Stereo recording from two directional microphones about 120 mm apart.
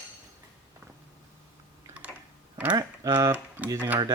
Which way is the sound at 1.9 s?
10° right (ahead or behind).